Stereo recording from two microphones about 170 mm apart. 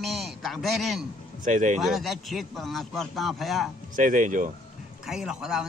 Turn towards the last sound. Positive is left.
turn(degrees=-5)  # may be behind; listen again after turning